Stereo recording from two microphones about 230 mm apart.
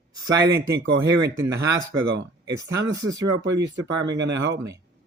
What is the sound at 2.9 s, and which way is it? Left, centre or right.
Speech, centre.